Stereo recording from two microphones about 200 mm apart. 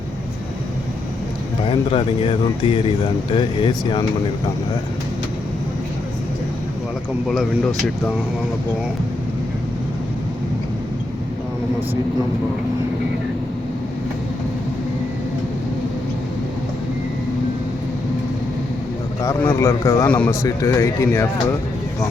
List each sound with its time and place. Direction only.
1.6 s speech: 25° left (ahead or behind)
19.2 s a man's voice: 15° left (ahead or behind)